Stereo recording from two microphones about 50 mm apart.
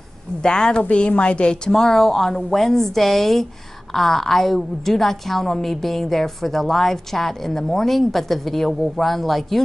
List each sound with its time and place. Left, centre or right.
0.4 s a woman's voice: centre
1.7 s a woman's voice: centre